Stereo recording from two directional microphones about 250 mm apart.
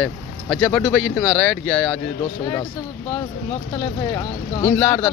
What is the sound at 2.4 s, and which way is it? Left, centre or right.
Speech, centre.